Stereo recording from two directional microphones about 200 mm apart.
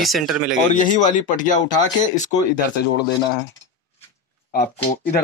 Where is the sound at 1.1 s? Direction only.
40° left (ahead or behind).